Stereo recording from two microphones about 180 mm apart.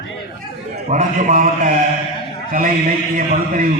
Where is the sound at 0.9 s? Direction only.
45° right (ahead or behind).